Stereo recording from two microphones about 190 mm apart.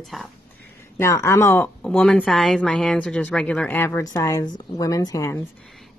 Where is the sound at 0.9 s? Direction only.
15° left (ahead or behind).